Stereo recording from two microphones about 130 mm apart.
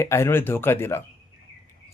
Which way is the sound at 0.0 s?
20° left (ahead or behind).